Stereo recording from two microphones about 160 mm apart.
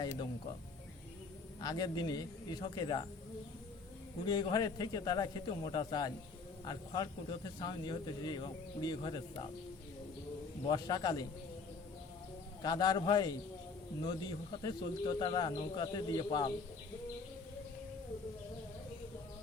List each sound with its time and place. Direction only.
0.0 s speech: 25° left (ahead or behind)
1.6 s speech: 25° left (ahead or behind)
4.3 s speech: 25° left (ahead or behind)
10.7 s speech: 25° left (ahead or behind)
12.6 s speech: 25° left (ahead or behind)